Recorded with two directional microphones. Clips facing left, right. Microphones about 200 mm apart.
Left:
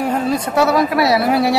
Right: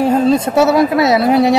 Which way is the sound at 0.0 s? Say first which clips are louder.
Right 6 dB; 25° right (ahead or behind).